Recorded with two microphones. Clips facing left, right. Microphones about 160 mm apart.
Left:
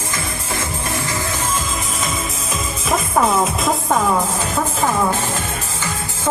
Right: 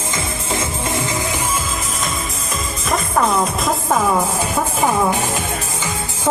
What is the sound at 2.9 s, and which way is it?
Music, centre (ahead or behind).